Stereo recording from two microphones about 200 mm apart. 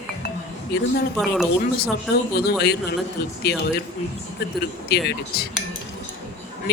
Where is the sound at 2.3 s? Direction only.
55° left (ahead or behind).